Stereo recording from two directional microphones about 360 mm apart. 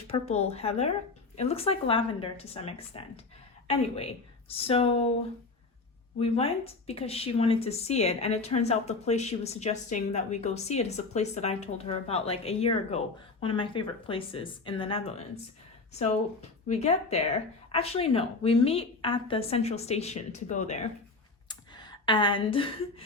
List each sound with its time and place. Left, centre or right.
0.1 s a woman's voice: centre
6.1 s a woman's voice: centre
21.4 s a sound: centre